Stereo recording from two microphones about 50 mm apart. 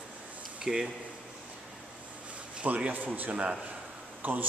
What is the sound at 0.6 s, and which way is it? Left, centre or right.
Speech, centre.